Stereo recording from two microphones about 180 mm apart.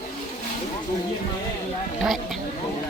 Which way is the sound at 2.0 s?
Centre (ahead or behind).